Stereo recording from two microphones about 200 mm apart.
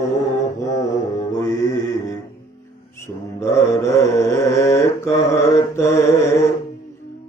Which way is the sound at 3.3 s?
15° left (ahead or behind).